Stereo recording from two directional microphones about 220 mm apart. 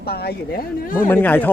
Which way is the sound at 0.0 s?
45° left (ahead or behind).